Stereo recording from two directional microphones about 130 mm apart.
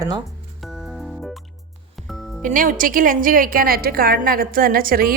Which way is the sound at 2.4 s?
90° right.